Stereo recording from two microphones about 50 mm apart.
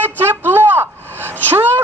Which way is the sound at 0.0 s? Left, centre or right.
Right.